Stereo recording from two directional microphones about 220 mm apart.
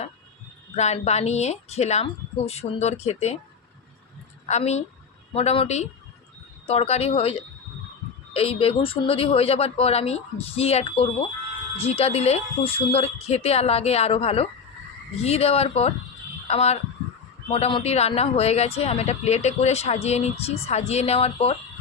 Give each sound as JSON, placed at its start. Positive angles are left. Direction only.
{"t": 0.8, "sound": "speech", "side_deg": 30}
{"t": 4.4, "sound": "a woman's voice", "side_deg": 30}